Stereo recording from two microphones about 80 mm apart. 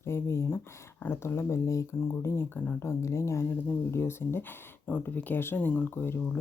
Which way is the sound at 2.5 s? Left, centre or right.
Left.